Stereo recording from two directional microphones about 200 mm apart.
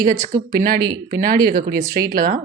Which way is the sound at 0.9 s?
50° right (ahead or behind).